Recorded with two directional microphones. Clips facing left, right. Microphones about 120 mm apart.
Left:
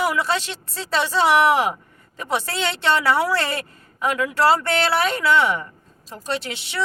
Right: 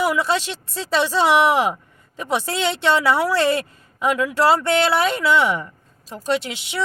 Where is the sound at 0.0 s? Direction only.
15° right (ahead or behind).